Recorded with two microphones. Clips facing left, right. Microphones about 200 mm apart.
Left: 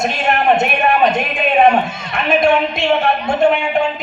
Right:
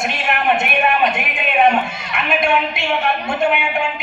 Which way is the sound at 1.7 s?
40° left (ahead or behind).